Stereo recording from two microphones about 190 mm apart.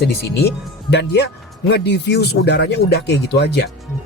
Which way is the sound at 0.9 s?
65° left (ahead or behind).